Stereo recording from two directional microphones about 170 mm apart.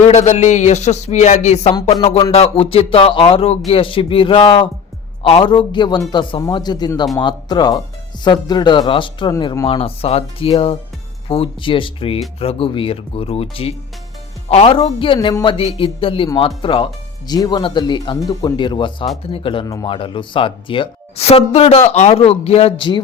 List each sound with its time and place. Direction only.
0.0 s speech: 40° left (ahead or behind)